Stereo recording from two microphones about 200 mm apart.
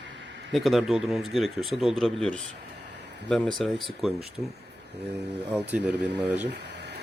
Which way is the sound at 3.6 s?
Centre (ahead or behind).